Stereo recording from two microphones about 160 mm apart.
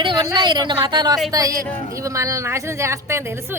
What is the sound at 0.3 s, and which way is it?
Speech, 25° right (ahead or behind).